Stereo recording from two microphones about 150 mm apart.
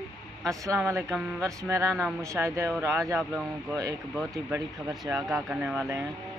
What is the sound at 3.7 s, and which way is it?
Speech, 25° right (ahead or behind).